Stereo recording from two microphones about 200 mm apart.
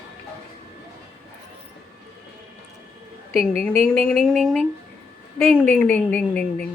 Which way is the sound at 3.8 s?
5° left (ahead or behind).